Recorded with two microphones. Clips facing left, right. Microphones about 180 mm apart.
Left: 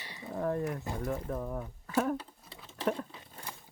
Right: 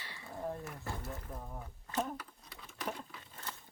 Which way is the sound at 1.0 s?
90° left.